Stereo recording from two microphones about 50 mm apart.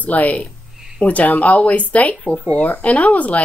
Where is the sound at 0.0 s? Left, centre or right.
Left.